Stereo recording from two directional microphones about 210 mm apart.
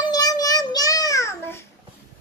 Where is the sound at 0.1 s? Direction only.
15° left (ahead or behind).